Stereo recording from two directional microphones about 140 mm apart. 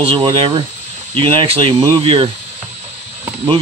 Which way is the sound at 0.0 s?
35° right (ahead or behind).